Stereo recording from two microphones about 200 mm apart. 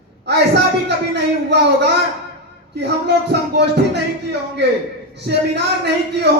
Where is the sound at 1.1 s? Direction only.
55° right (ahead or behind).